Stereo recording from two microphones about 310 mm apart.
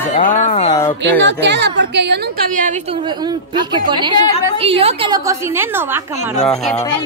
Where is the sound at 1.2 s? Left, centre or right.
Right.